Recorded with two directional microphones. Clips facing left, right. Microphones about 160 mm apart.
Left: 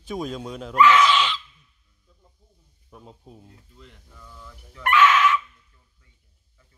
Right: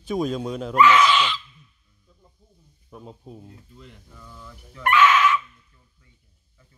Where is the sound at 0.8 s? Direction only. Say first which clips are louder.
Even; 5° right (ahead or behind).